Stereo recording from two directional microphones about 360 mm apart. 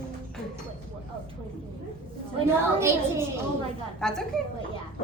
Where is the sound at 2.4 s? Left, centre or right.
Centre.